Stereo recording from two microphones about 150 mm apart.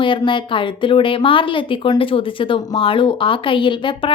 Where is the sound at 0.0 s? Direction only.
35° left (ahead or behind).